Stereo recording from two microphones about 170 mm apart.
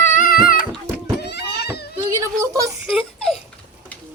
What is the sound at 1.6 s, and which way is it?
Children playing, 70° left (ahead or behind).